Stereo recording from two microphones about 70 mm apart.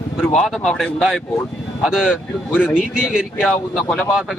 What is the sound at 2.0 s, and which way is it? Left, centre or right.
Speech, left.